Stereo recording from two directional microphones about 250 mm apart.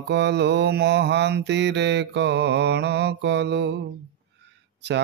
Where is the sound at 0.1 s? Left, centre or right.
Right.